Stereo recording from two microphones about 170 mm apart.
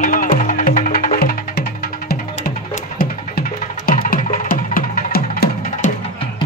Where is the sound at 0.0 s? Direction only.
55° left (ahead or behind).